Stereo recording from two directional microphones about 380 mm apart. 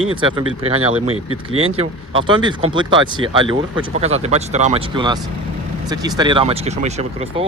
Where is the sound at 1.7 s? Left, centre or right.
Centre.